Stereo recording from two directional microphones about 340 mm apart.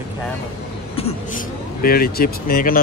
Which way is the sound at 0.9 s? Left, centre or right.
Left.